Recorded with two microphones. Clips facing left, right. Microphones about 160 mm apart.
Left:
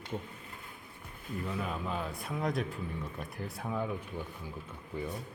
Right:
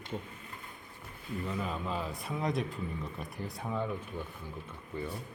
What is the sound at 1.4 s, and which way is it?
Speech, centre (ahead or behind).